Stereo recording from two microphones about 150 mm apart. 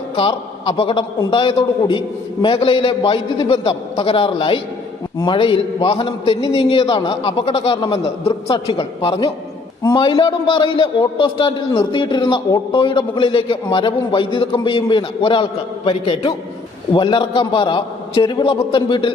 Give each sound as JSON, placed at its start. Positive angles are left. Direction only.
{"t": 0.2, "sound": "a man's voice", "side_deg": 35}